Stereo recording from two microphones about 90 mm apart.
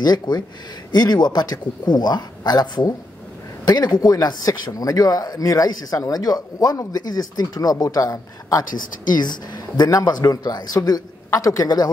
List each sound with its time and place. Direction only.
0.0 s speech: 50° left (ahead or behind)
9.1 s speech: 50° left (ahead or behind)